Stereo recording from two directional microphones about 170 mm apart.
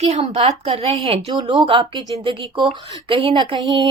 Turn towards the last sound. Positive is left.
turn(degrees=-25)  # may be behind; listen again after turning